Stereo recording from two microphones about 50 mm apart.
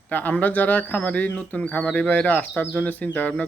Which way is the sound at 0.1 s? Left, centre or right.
Left.